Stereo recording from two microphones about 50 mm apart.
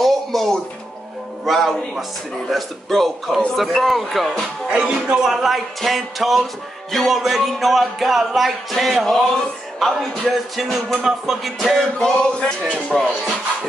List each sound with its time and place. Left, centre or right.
0.0 s music: centre
1.4 s a man's voice: centre
4.6 s music: centre
5.1 s a man's voice: centre
9.0 s a man's voice: centre
12.4 s music: centre